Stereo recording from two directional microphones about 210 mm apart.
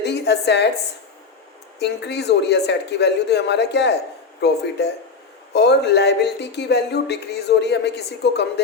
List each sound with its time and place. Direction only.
0.0 s a woman's voice: 55° left (ahead or behind)
1.8 s speech: 55° left (ahead or behind)